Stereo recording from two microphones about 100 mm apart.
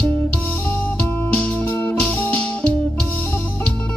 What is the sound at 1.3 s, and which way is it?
Music, 15° left (ahead or behind).